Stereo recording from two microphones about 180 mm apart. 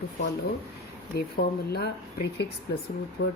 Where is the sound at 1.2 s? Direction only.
60° left (ahead or behind).